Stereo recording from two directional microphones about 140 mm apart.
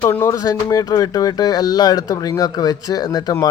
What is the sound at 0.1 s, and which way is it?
Speech, 20° left (ahead or behind).